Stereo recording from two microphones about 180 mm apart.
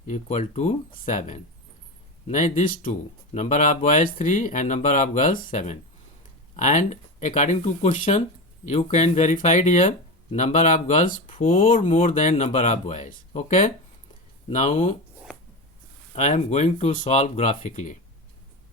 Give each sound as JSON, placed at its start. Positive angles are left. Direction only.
{"t": 0.1, "sound": "speech", "side_deg": 40}
{"t": 16.1, "sound": "speech", "side_deg": 40}